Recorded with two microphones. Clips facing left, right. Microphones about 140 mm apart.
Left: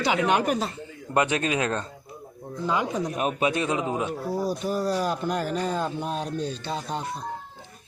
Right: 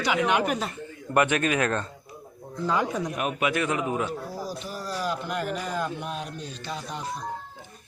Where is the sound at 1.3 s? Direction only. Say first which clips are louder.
Right 1 dB; 25° left (ahead or behind).